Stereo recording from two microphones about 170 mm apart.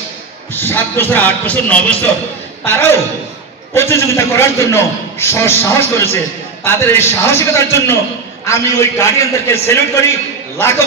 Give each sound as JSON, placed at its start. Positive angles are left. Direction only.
{"t": 0.5, "sound": "a man's voice", "side_deg": 10}